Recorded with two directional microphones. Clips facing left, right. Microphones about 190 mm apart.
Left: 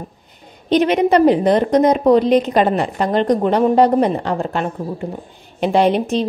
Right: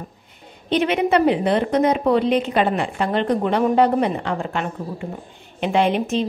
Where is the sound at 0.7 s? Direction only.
40° left (ahead or behind).